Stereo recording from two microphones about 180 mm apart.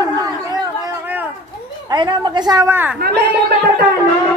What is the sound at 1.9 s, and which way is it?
A woman's voice, 25° right (ahead or behind).